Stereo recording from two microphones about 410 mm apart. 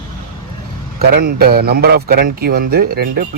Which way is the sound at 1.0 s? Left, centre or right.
Right.